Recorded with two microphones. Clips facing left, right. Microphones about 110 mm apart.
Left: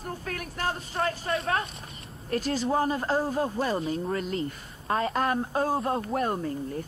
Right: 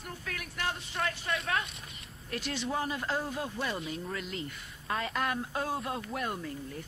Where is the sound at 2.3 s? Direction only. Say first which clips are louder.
Left 8 dB; 40° left (ahead or behind).